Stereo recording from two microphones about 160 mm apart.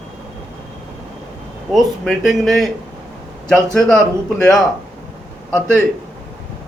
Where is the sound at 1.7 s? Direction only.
Centre (ahead or behind).